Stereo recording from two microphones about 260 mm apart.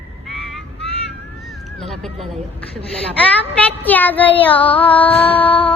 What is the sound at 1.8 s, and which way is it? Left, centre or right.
Cat, centre.